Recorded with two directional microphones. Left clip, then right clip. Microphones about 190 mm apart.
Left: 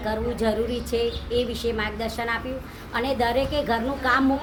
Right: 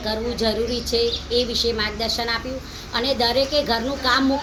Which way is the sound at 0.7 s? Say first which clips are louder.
Right 4 dB; 35° left (ahead or behind).